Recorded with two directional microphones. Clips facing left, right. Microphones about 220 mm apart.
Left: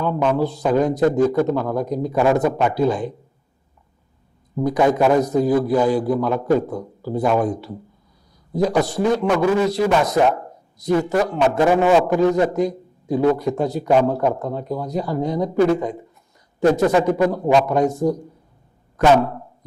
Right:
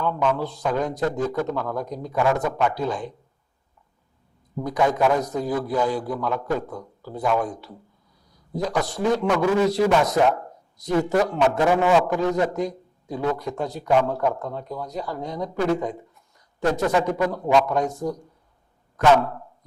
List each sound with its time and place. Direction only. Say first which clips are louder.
0.3 s a man's voice: left 7 dB; 5° left (ahead or behind)
2.2 s speech: left 4 dB; 15° left (ahead or behind)
2.7 s a man's voice: left 7 dB; 5° left (ahead or behind)
4.9 s a man's voice: left 6 dB; 5° left (ahead or behind)
8.8 s a man's voice: left 4 dB; 5° left (ahead or behind)
11.7 s a man's voice: left 5 dB; 20° left (ahead or behind)
12.0 s a man's voice: left 5 dB; 5° left (ahead or behind)